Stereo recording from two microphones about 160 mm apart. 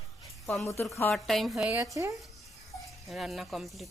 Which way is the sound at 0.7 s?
15° left (ahead or behind).